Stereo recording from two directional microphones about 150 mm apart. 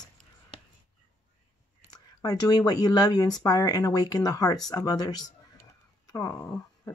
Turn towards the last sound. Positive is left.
turn(degrees=15)  # may be behind; listen again after turning